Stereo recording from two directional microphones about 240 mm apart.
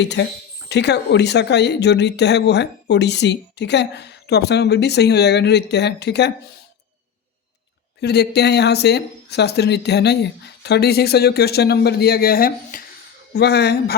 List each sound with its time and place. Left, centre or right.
0.0 s speech: left
8.0 s speech: left